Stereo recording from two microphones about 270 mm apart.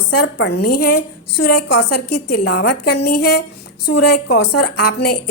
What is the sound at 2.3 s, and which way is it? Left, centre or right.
A woman's voice, left.